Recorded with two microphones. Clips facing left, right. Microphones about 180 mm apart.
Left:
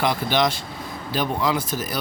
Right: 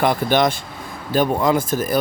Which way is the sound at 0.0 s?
50° right (ahead or behind).